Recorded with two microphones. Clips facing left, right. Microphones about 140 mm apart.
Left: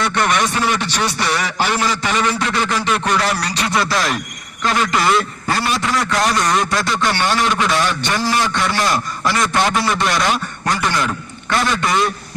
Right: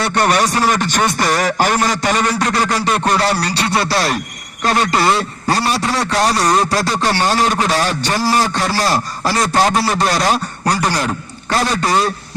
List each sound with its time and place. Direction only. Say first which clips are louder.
0.0 s a man's voice: right 3 dB; 35° right (ahead or behind)